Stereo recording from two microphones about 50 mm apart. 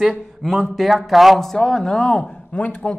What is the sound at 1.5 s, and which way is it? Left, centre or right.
Speech, centre.